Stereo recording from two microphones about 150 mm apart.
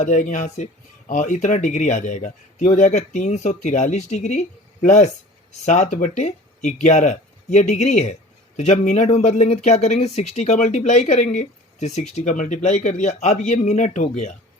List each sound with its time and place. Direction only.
0.0 s speech: 55° left (ahead or behind)